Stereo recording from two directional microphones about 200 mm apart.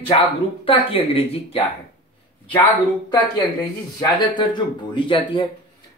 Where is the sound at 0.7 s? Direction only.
30° left (ahead or behind).